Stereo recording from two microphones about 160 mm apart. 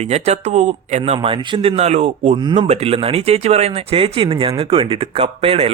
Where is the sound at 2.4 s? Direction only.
30° right (ahead or behind).